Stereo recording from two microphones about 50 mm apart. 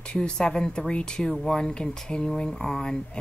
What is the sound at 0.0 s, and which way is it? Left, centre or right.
A woman's voice, centre.